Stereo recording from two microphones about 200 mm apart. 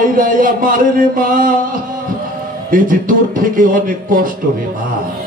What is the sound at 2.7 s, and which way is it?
Speech, 45° right (ahead or behind).